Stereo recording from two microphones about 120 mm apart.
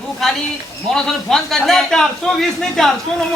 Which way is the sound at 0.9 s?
5° left (ahead or behind).